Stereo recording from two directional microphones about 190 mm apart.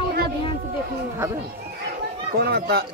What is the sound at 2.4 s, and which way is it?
Speech, 55° right (ahead or behind).